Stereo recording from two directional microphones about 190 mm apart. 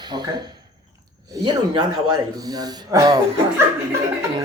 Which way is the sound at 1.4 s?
25° right (ahead or behind).